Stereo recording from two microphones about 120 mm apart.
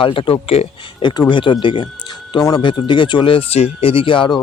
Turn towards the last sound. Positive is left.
turn(degrees=45)  # may be behind; listen again after turning